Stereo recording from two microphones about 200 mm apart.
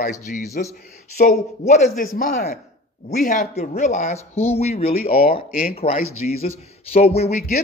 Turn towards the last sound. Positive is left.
turn(degrees=30)  # may be behind; listen again after turning